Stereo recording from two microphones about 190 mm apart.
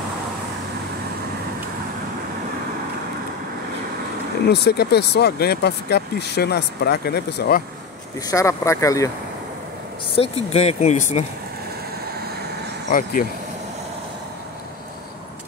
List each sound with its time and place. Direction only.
4.5 s speech: 60° left (ahead or behind)
8.3 s speech: 15° left (ahead or behind)
10.1 s speech: 30° left (ahead or behind)